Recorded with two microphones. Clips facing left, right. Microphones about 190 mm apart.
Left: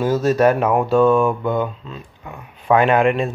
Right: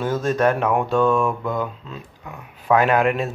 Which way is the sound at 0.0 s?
10° left (ahead or behind).